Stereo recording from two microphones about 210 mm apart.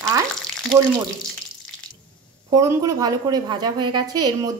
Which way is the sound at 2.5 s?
15° right (ahead or behind).